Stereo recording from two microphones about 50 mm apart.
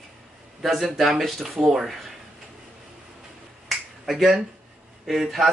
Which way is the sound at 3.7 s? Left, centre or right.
Centre.